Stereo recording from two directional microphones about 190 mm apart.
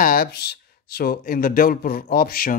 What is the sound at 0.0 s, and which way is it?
Speech, 50° left (ahead or behind).